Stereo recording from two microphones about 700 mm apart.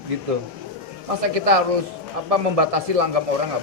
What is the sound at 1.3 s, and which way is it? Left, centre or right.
A man's voice, right.